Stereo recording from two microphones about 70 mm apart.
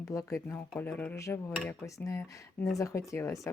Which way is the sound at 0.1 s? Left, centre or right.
Left.